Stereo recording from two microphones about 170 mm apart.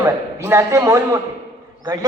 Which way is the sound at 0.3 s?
15° right (ahead or behind).